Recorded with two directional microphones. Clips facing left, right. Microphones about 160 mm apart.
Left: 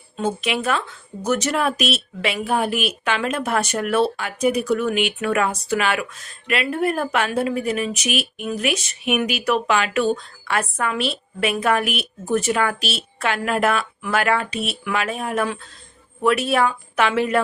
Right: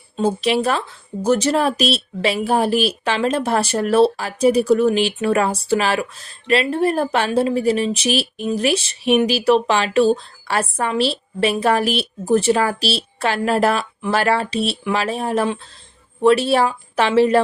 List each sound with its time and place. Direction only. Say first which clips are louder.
0.2 s speech: right 5 dB; 35° right (ahead or behind)